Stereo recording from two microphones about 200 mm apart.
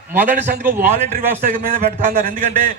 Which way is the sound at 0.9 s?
40° right (ahead or behind).